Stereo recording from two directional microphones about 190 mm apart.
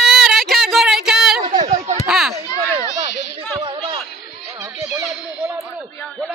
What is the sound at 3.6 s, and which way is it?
Chatter, 25° right (ahead or behind).